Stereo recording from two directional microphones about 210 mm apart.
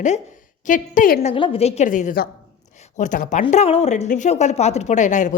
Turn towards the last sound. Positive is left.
turn(degrees=35)  # may be behind; listen again after turning